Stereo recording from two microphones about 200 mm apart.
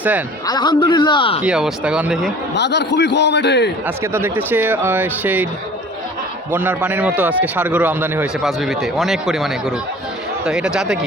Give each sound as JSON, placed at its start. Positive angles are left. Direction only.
{"t": 0.0, "sound": "a man's voice", "side_deg": -10}
{"t": 0.4, "sound": "a man's voice", "side_deg": 20}
{"t": 1.5, "sound": "speech", "side_deg": -5}
{"t": 2.6, "sound": "a man's voice", "side_deg": 55}
{"t": 3.8, "sound": "a man's voice", "side_deg": -10}
{"t": 6.5, "sound": "a man's voice", "side_deg": -10}
{"t": 8.4, "sound": "speech", "side_deg": 0}